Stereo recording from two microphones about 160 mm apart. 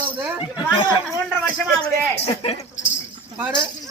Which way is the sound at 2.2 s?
40° left (ahead or behind).